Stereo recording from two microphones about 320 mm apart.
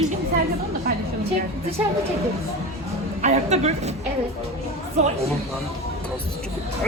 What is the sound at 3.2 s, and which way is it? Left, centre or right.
Speech, right.